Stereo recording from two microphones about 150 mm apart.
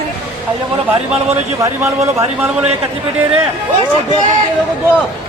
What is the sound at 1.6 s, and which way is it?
Speech, 20° right (ahead or behind).